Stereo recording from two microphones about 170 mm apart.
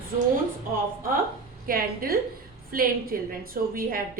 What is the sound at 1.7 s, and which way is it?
A woman's voice, 60° right (ahead or behind).